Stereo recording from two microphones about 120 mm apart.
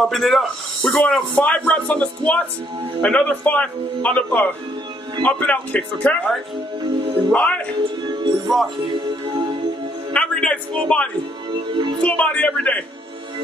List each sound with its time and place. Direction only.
0.0 s speech: centre (ahead or behind)
0.9 s speech: 10° left (ahead or behind)
7.3 s speech: 10° left (ahead or behind)
7.8 s music: 40° right (ahead or behind)
8.8 s speech: 40° right (ahead or behind)
10.1 s a man's voice: 10° left (ahead or behind)
11.5 s speech: 40° right (ahead or behind)
12.0 s speech: 10° left (ahead or behind)